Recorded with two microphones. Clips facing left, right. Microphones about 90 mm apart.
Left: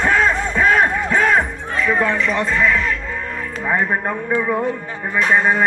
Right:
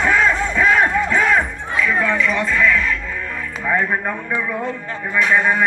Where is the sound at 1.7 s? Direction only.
35° left (ahead or behind).